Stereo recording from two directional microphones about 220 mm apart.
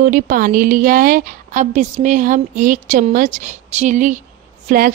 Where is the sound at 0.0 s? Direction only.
40° right (ahead or behind).